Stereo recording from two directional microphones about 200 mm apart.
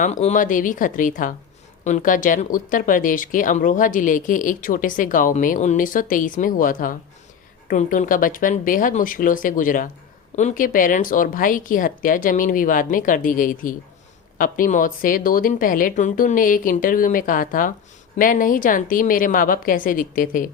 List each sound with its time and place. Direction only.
0.0 s speech: 35° left (ahead or behind)